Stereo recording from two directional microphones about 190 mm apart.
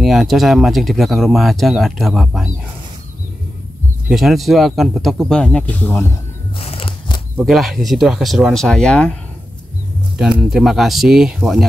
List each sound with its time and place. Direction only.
0.0 s speech: centre (ahead or behind)
4.1 s speech: centre (ahead or behind)
6.6 s a sound: 30° left (ahead or behind)
7.3 s speech: centre (ahead or behind)
10.5 s speech: centre (ahead or behind)